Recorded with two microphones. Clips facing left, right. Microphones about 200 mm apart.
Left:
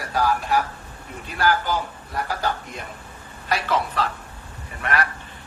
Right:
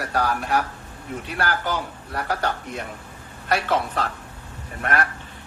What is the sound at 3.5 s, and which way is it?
A man's voice, 55° right (ahead or behind).